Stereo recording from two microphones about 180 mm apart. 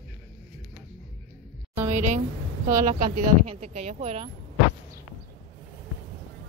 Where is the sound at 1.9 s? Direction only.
45° right (ahead or behind).